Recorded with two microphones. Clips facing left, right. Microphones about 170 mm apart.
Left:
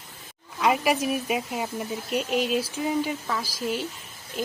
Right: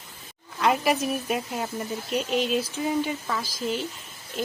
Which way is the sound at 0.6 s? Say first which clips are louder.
Even; 10° left (ahead or behind).